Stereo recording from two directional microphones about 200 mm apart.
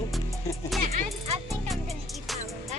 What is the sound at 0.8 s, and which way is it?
Speech, 30° right (ahead or behind).